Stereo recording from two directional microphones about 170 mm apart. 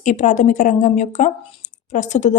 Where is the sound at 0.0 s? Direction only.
45° left (ahead or behind).